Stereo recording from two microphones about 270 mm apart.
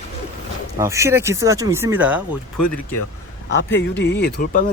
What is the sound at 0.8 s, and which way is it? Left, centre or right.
Speech, centre.